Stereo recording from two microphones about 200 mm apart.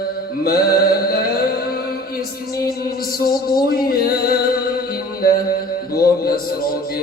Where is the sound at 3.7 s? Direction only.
50° left (ahead or behind).